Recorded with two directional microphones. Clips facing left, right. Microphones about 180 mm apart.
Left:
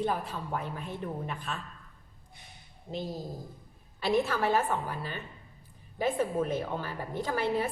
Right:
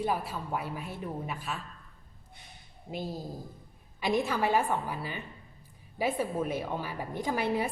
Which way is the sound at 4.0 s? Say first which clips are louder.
Left 1 dB; 15° right (ahead or behind).